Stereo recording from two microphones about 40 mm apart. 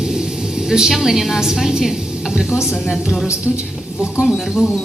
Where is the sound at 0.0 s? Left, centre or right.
Centre.